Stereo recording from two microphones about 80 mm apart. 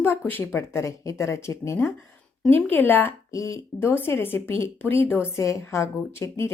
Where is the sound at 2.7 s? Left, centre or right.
Left.